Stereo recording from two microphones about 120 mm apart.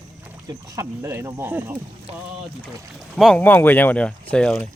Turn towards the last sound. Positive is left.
turn(degrees=10)  # may be behind; listen again after turning